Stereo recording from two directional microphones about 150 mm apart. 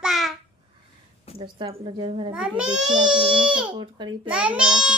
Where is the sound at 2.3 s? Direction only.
5° right (ahead or behind).